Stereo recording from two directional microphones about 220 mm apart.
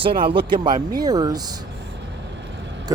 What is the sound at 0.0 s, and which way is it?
Speech, 25° right (ahead or behind).